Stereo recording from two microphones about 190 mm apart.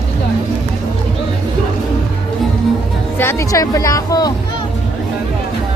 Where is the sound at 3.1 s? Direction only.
10° left (ahead or behind).